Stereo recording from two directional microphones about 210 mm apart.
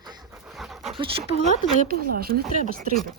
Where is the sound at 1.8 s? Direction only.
45° right (ahead or behind).